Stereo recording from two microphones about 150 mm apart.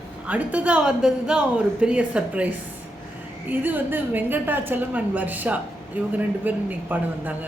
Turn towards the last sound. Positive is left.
turn(degrees=-10)  # may be behind; listen again after turning